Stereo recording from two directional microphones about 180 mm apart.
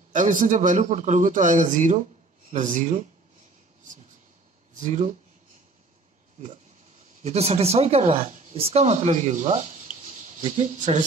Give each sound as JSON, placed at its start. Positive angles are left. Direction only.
{"t": 0.1, "sound": "a man's voice", "side_deg": -45}
{"t": 4.7, "sound": "a man's voice", "side_deg": -40}
{"t": 7.2, "sound": "speech", "side_deg": -35}